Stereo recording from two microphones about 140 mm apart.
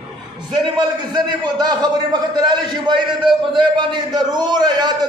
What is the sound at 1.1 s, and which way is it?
A man's voice, 30° right (ahead or behind).